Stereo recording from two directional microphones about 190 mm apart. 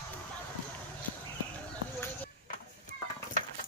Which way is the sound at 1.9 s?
10° left (ahead or behind).